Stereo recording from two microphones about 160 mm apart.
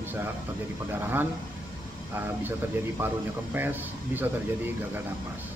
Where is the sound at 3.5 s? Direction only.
10° right (ahead or behind).